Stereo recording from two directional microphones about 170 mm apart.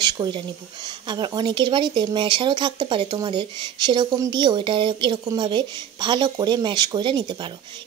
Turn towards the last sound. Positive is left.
turn(degrees=-25)  # may be behind; listen again after turning